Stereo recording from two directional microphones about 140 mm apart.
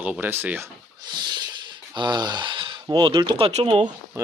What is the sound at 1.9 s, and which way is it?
Speech, 30° right (ahead or behind).